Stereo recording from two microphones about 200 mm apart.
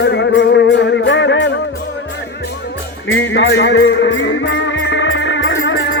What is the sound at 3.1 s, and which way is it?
Music, 65° left (ahead or behind).